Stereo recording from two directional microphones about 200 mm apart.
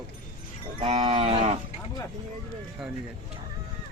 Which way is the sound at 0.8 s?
25° right (ahead or behind).